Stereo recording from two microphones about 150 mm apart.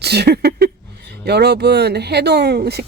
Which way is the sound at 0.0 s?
90° right.